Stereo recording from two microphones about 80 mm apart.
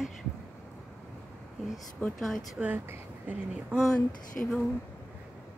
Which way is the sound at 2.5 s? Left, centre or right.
Centre.